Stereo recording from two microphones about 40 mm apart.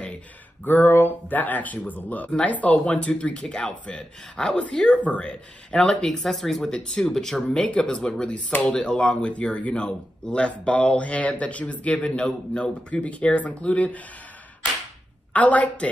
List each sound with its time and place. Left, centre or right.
0.7 s speech: left
3.4 s speech: centre
4.9 s speech: left
6.0 s speech: centre
6.6 s speech: centre
7.6 s speech: left
9.8 s speech: left
15.3 s speech: left